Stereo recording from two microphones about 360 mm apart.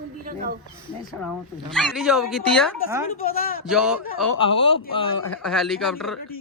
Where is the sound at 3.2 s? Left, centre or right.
Left.